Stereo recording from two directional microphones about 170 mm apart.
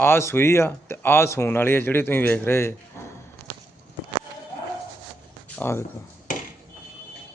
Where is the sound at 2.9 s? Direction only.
15° left (ahead or behind).